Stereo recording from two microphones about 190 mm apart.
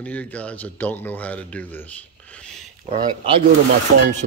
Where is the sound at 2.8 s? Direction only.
30° right (ahead or behind).